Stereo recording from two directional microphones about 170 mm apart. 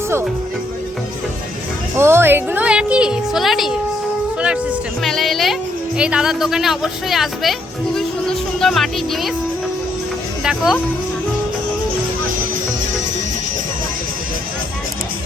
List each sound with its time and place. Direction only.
2.0 s a woman's voice: 15° right (ahead or behind)
4.4 s music: 5° right (ahead or behind)
5.0 s speech: centre (ahead or behind)
7.9 s music: 5° left (ahead or behind)
10.4 s speech: centre (ahead or behind)